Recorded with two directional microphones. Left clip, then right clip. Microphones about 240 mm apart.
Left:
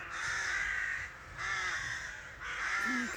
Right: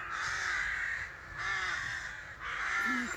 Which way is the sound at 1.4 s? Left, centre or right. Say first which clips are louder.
Right 1 dB; centre.